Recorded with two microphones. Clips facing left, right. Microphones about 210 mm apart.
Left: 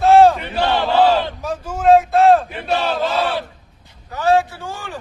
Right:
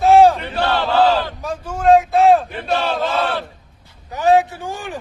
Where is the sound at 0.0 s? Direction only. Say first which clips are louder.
Even; centre (ahead or behind).